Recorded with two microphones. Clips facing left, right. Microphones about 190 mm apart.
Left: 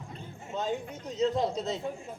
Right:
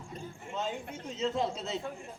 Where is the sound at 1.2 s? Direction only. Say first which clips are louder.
Left 4 dB; 40° left (ahead or behind).